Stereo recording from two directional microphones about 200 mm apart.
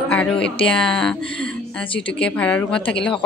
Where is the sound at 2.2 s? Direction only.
5° left (ahead or behind).